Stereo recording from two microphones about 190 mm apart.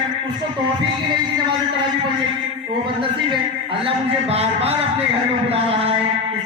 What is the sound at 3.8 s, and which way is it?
A man's voice, 30° right (ahead or behind).